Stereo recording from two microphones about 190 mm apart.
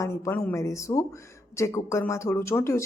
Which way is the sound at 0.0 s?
15° left (ahead or behind).